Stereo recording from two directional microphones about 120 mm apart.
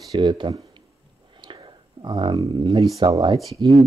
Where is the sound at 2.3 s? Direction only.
35° right (ahead or behind).